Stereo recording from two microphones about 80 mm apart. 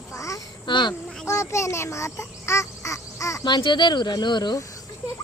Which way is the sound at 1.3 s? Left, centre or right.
Left.